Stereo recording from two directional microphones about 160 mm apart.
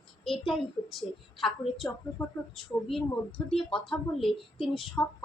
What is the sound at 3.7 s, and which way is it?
A woman's voice, centre (ahead or behind).